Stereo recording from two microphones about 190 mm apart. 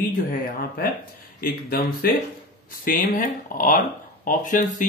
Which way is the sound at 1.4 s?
50° left (ahead or behind).